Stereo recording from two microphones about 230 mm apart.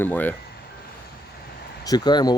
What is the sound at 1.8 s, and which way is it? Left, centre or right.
Speech, centre.